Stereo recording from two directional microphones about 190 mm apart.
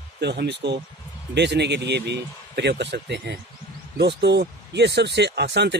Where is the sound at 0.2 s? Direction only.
65° right (ahead or behind).